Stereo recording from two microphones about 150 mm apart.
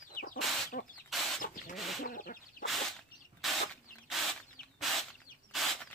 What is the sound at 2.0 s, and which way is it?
Bird, 70° left (ahead or behind).